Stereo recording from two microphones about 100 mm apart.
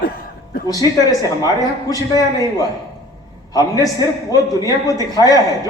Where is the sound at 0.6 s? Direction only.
40° left (ahead or behind).